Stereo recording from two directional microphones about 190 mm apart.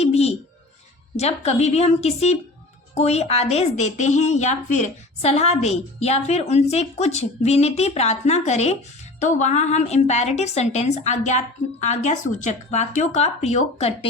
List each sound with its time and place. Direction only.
0.0 s music: 35° left (ahead or behind)
1.1 s a woman's voice: 35° left (ahead or behind)